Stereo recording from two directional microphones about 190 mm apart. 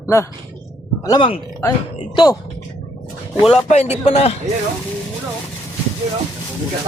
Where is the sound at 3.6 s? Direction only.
35° left (ahead or behind).